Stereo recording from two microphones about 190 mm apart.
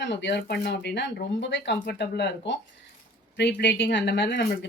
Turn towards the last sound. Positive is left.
turn(degrees=65)  # may be behind; listen again after turning